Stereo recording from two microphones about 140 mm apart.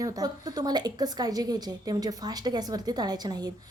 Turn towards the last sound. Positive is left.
turn(degrees=-30)  # may be behind; listen again after turning